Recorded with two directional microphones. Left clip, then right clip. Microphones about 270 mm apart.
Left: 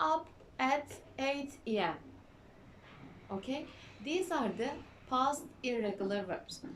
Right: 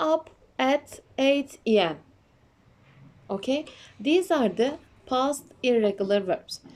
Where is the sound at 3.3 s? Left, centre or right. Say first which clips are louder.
Right 12 dB; right.